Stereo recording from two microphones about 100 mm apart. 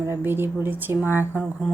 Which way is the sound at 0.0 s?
25° right (ahead or behind).